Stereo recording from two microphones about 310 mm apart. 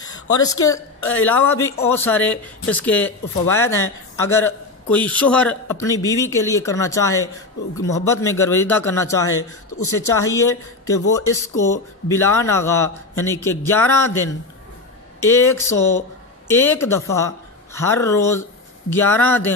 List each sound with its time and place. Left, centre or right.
0.0 s a sound: centre
0.7 s speech: centre
11.1 s speech: left
11.4 s speech: centre